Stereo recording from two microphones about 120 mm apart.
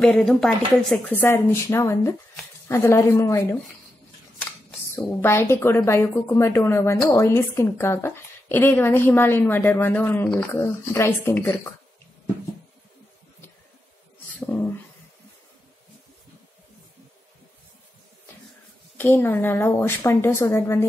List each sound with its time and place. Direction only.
0.0 s speech: 5° left (ahead or behind)
1.0 s speech: 15° left (ahead or behind)
4.5 s speech: 15° left (ahead or behind)
14.4 s speech: 15° left (ahead or behind)
18.9 s speech: 20° left (ahead or behind)